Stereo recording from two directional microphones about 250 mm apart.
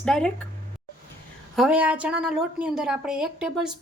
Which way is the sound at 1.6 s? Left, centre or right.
Centre.